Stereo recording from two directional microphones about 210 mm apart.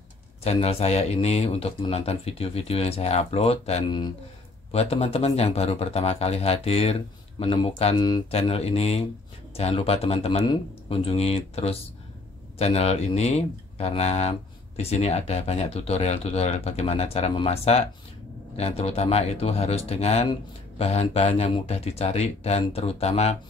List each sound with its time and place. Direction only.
0.4 s speech: 30° left (ahead or behind)